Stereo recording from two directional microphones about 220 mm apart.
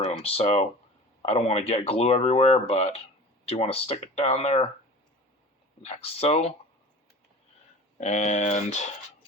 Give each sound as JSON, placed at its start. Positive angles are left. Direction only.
{"t": 0.1, "sound": "speech", "side_deg": 25}
{"t": 5.8, "sound": "speech", "side_deg": 25}
{"t": 7.9, "sound": "speech", "side_deg": 35}